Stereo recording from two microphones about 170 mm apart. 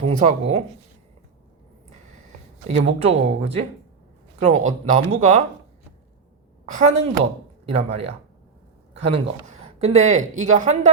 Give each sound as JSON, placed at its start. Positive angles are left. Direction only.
{"t": 0.0, "sound": "speech", "side_deg": -45}
{"t": 2.6, "sound": "speech", "side_deg": -40}
{"t": 6.7, "sound": "speech", "side_deg": -40}